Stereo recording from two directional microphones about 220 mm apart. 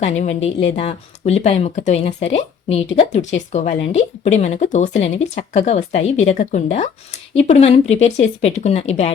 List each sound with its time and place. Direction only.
0.0 s speech: 30° left (ahead or behind)